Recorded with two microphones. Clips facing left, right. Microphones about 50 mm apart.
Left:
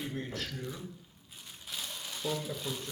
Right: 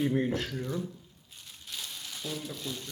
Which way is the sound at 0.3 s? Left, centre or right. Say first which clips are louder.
Right 6 dB; centre.